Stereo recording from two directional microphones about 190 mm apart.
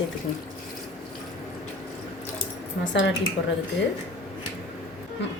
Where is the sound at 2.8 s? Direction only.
80° left.